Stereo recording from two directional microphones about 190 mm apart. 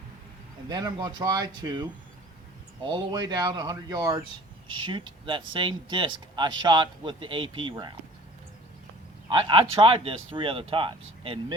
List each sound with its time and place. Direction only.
0.7 s speech: 20° right (ahead or behind)
9.3 s speech: 25° right (ahead or behind)